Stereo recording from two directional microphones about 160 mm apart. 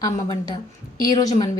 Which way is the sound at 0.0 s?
30° left (ahead or behind).